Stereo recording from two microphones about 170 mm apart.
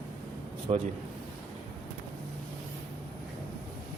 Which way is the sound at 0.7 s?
35° right (ahead or behind).